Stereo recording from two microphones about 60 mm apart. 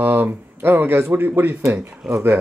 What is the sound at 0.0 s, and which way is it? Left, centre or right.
Speech, right.